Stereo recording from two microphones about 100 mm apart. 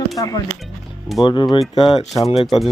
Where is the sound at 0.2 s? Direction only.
40° left (ahead or behind).